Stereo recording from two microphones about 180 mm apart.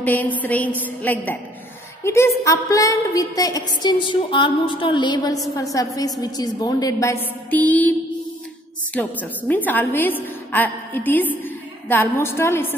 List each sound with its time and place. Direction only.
0.0 s a woman's voice: 10° left (ahead or behind)
8.9 s a woman's voice: 10° left (ahead or behind)